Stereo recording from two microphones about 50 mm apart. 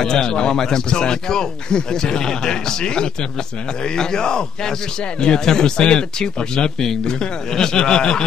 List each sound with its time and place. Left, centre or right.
0.0 s speech: centre